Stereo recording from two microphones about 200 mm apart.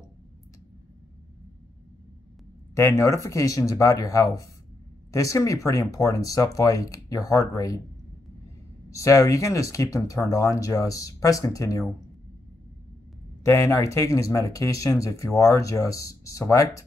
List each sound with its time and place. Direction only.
2.7 s speech: 15° left (ahead or behind)
8.9 s speech: 15° left (ahead or behind)
13.4 s speech: 15° left (ahead or behind)